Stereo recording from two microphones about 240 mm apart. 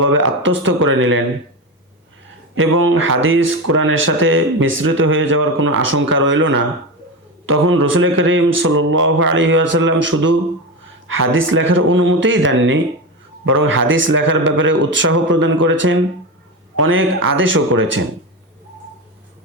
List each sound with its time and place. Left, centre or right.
0.0 s speech: right
2.6 s speech: right